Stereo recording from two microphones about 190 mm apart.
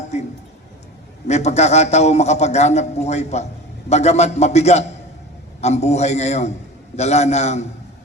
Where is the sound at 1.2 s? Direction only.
35° left (ahead or behind).